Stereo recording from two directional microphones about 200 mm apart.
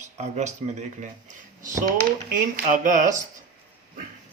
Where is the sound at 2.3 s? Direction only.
40° right (ahead or behind).